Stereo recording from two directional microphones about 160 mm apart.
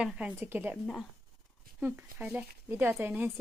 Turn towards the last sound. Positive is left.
turn(degrees=-10)  # may be behind; listen again after turning